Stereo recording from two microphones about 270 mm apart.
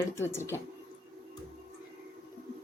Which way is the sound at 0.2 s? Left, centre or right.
Centre.